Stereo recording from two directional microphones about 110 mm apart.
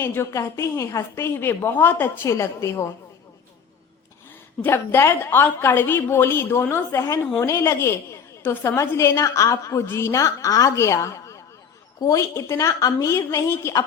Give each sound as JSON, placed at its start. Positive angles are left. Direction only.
{"t": 0.0, "sound": "a woman's voice", "side_deg": 25}
{"t": 4.6, "sound": "a woman's voice", "side_deg": 25}